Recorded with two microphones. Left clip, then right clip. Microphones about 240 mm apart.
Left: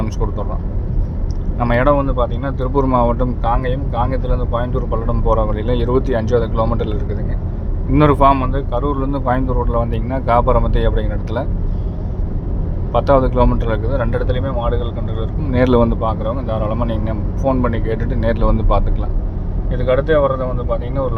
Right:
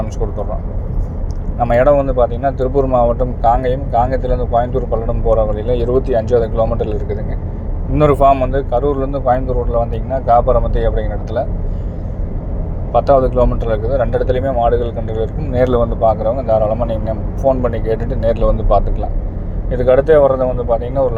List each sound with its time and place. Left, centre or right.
1.5 s speech: centre
2.8 s speech: centre
3.4 s speech: centre
12.9 s speech: centre
15.5 s speech: centre
16.0 s speech: centre
19.7 s speech: centre